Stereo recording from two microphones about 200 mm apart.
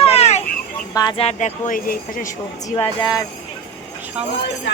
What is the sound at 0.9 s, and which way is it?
Speech, 20° left (ahead or behind).